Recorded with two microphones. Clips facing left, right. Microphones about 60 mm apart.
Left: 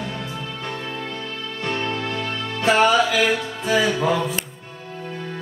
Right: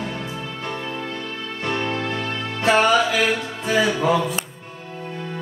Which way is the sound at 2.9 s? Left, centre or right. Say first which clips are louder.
Even; centre.